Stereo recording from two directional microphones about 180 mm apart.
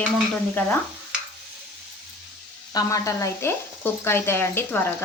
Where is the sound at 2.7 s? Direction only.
20° left (ahead or behind).